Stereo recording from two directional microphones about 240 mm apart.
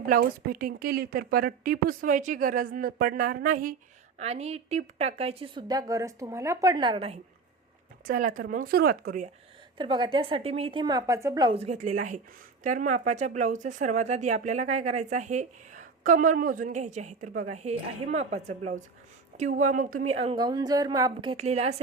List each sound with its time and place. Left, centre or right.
0.1 s a woman's voice: right
8.0 s speech: right
9.7 s a woman's voice: centre